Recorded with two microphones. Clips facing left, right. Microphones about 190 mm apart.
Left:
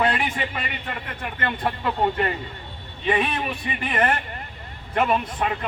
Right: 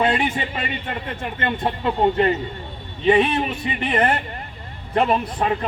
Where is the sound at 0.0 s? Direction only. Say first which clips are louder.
Right 3 dB; 25° right (ahead or behind).